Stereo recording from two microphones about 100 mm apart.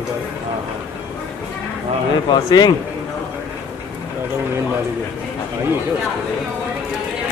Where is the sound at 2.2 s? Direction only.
45° left (ahead or behind).